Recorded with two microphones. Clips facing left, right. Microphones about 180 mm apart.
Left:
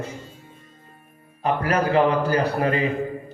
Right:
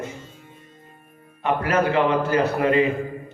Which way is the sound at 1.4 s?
35° left (ahead or behind).